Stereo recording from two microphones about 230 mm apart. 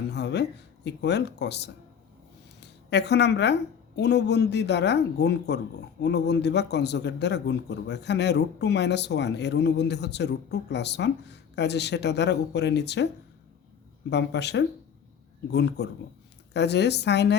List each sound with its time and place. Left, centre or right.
0.1 s a sound: left
0.9 s speech: left
14.1 s speech: left